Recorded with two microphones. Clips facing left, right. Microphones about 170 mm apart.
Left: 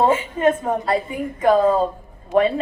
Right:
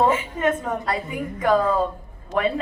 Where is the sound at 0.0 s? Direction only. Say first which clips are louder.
Left 3 dB; 30° left (ahead or behind).